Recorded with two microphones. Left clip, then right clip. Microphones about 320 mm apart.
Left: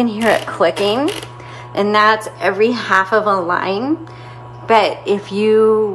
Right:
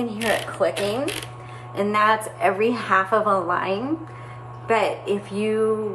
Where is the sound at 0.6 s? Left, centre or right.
Left.